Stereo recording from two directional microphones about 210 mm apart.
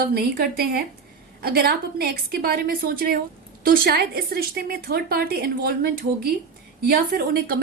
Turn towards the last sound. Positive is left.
turn(degrees=-45)  # may be behind; listen again after turning